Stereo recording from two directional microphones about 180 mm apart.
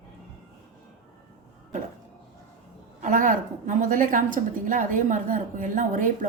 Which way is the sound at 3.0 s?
45° right (ahead or behind).